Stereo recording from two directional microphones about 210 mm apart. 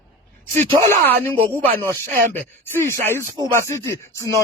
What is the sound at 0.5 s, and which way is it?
Speech, 10° left (ahead or behind).